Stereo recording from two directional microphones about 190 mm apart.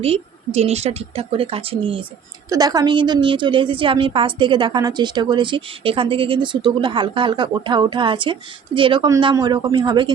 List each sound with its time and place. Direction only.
0.0 s a woman's voice: 30° right (ahead or behind)